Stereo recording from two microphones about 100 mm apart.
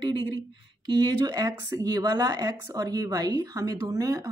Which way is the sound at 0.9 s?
40° right (ahead or behind).